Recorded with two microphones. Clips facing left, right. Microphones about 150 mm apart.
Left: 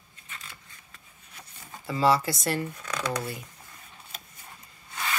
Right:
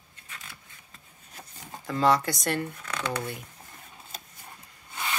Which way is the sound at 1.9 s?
5° left (ahead or behind).